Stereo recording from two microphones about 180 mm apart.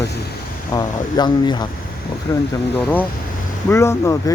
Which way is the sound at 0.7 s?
20° left (ahead or behind).